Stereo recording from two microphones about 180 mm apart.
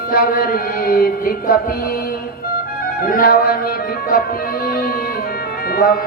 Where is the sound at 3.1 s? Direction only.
55° left (ahead or behind).